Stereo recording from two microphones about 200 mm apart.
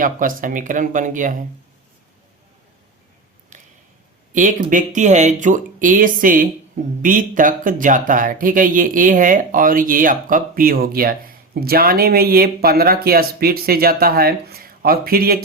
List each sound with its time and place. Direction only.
0.0 s speech: 45° right (ahead or behind)
3.5 s a sound: 35° right (ahead or behind)
4.4 s speech: 40° right (ahead or behind)